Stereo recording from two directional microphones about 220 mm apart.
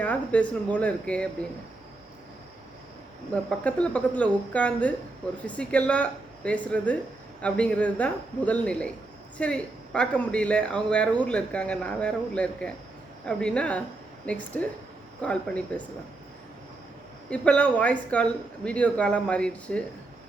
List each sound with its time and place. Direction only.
0.0 s a woman's voice: 5° left (ahead or behind)
3.6 s a woman's voice: 5° left (ahead or behind)
17.2 s a woman's voice: 5° left (ahead or behind)